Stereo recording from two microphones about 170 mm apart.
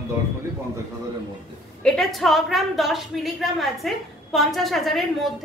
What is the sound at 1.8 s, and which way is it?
A woman's voice, 5° left (ahead or behind).